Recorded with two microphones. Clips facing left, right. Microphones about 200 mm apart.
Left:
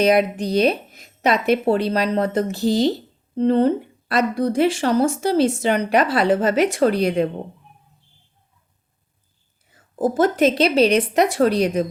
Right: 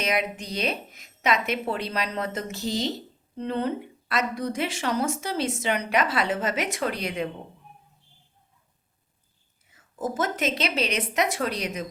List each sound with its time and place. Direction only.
0.0 s speech: 35° left (ahead or behind)
9.7 s speech: 35° left (ahead or behind)